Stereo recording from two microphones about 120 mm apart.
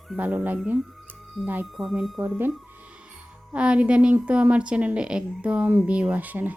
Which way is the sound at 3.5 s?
10° right (ahead or behind).